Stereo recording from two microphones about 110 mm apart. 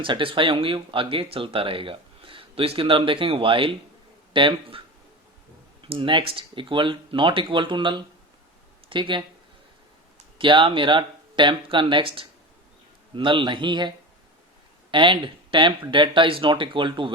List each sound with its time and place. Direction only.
0.0 s speech: 50° right (ahead or behind)
5.8 s speech: 50° right (ahead or behind)
10.3 s speech: 50° right (ahead or behind)